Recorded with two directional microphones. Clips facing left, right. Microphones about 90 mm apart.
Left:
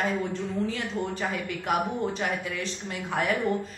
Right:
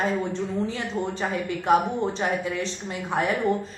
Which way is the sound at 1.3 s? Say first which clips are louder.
Right 11 dB; 30° right (ahead or behind).